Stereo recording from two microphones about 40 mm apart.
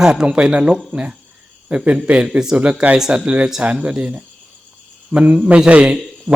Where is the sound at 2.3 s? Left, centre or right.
Centre.